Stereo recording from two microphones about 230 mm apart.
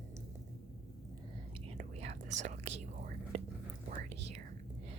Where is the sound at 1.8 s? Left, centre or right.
Right.